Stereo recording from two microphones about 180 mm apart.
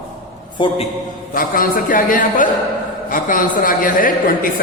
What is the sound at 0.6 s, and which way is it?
Speech, 25° left (ahead or behind).